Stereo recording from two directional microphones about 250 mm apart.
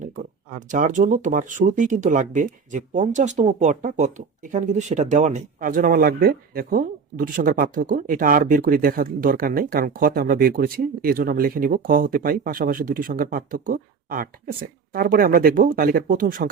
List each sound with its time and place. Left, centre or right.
0.7 s speech: right